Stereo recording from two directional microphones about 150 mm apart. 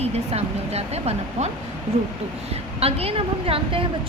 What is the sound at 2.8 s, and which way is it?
A woman's voice, 40° right (ahead or behind).